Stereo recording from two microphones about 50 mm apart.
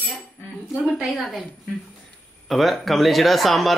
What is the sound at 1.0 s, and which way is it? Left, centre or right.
Speech, centre.